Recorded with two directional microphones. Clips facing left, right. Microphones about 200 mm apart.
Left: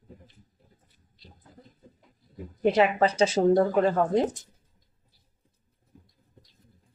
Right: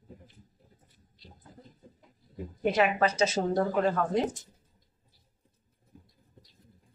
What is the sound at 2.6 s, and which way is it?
A woman's voice, 30° left (ahead or behind).